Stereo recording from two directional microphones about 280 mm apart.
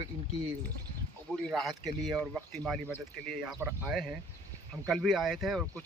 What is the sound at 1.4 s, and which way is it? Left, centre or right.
Speech, centre.